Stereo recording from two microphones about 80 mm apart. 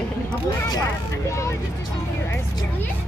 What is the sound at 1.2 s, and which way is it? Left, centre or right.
Speech, left.